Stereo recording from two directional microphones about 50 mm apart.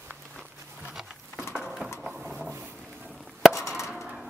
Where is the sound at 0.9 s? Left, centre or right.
Centre.